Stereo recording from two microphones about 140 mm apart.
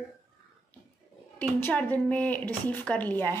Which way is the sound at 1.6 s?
10° left (ahead or behind).